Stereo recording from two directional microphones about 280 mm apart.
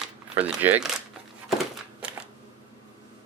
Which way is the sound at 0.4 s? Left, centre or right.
Centre.